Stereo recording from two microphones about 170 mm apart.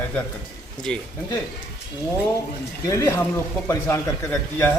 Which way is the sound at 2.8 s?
15° left (ahead or behind).